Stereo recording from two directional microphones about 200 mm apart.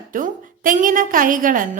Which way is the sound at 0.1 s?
40° right (ahead or behind).